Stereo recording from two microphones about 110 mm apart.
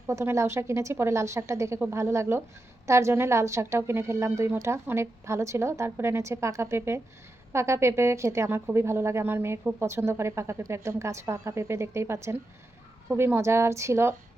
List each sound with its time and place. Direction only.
0.1 s speech: 25° right (ahead or behind)